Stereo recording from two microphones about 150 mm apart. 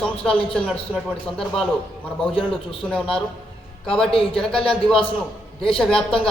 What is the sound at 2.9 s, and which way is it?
Speech, 5° left (ahead or behind).